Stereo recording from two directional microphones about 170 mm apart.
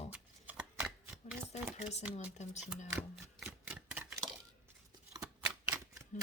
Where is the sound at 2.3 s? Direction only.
40° left (ahead or behind).